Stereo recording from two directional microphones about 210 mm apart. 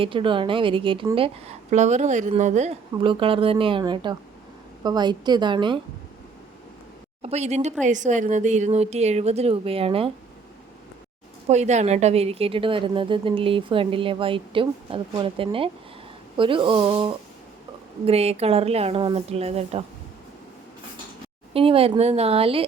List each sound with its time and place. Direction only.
0.0 s a woman's voice: 25° right (ahead or behind)
7.2 s speech: 30° right (ahead or behind)
11.4 s a woman's voice: 30° right (ahead or behind)
21.5 s a woman's voice: 25° right (ahead or behind)